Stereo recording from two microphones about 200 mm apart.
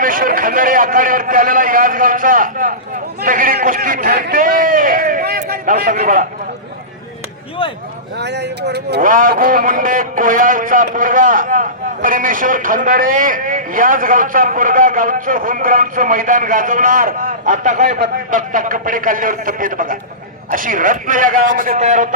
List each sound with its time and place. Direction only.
0.0 s a man's voice: 45° right (ahead or behind)
8.2 s a man's voice: 55° right (ahead or behind); by 22.1 s 35° right (ahead or behind)